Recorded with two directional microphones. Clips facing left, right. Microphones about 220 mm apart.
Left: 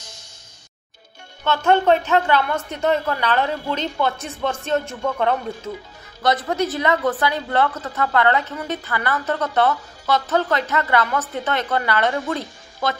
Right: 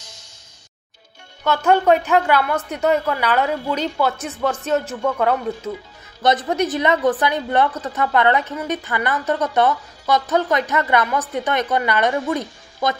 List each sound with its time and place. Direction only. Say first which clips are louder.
1.4 s a woman's voice: right 1 dB; 10° right (ahead or behind)
6.2 s a woman's voice: right 2 dB; 20° right (ahead or behind)